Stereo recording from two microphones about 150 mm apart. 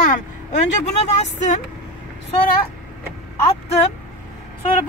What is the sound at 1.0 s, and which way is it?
Speech, 50° left (ahead or behind).